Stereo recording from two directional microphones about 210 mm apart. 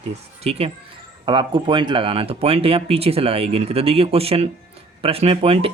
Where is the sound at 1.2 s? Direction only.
20° right (ahead or behind).